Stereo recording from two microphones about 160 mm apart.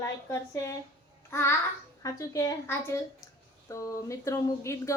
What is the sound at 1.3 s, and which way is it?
Babbling, 15° left (ahead or behind).